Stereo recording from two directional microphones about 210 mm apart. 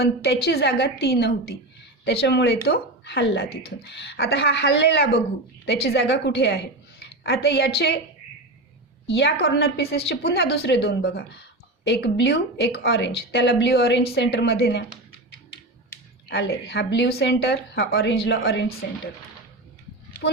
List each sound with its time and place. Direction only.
0.0 s a woman's voice: 50° left (ahead or behind)
9.0 s a woman's voice: 55° left (ahead or behind)
16.3 s a woman's voice: 50° left (ahead or behind)